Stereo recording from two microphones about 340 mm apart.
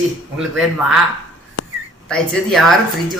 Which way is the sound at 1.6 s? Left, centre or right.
Left.